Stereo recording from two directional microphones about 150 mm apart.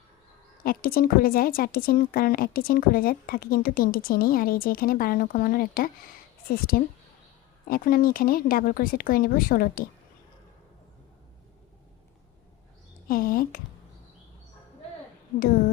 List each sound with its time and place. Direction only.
0.6 s a woman's voice: 75° left (ahead or behind)
13.1 s a woman's voice: 75° left (ahead or behind)